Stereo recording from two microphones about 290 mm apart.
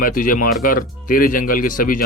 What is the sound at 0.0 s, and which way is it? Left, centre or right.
Speech, left.